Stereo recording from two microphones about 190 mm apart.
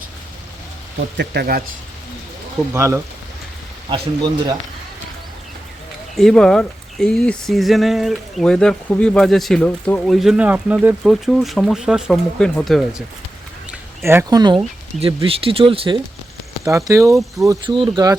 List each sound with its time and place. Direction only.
0.9 s speech: 60° right (ahead or behind)
2.7 s speech: 15° right (ahead or behind)
3.8 s speech: 25° right (ahead or behind)
6.1 s speech: 5° left (ahead or behind)
13.7 s a sound: 15° right (ahead or behind)
14.9 s speech: 30° right (ahead or behind)
16.6 s speech: 15° right (ahead or behind)